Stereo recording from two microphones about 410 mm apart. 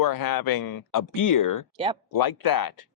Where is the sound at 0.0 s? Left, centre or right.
Left.